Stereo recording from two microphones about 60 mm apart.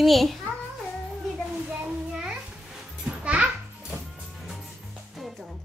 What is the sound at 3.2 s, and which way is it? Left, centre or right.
Music, right.